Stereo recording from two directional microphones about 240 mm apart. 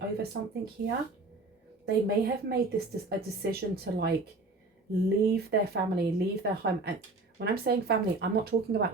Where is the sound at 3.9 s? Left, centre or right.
Right.